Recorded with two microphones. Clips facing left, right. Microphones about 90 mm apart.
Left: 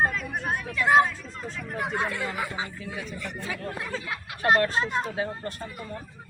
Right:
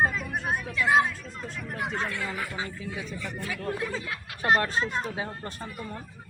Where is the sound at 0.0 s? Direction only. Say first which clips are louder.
Even; centre (ahead or behind).